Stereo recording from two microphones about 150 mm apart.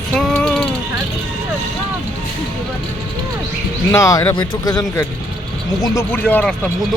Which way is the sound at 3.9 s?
20° left (ahead or behind).